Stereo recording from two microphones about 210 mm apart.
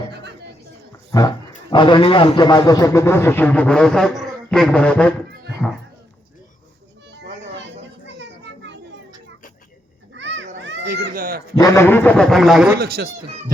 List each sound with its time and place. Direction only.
0.1 s a sound: 55° right (ahead or behind)
1.7 s a man's voice: 20° left (ahead or behind); by 5.1 s 5° left (ahead or behind)
8.0 s children playing: 55° right (ahead or behind)
10.2 s children playing: 60° right (ahead or behind)
10.6 s a sound: 55° right (ahead or behind)
11.5 s a man's voice: 15° left (ahead or behind); by 12.7 s centre (ahead or behind)
12.8 s speech: 45° right (ahead or behind)